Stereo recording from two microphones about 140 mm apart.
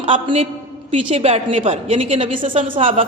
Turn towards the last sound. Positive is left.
turn(degrees=-40)  # may be behind; listen again after turning